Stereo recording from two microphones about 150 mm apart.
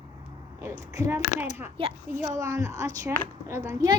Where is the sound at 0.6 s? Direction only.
20° right (ahead or behind).